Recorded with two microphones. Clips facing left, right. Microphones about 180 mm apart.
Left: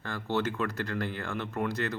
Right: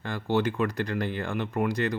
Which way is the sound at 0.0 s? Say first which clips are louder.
Right 4 dB; 15° right (ahead or behind).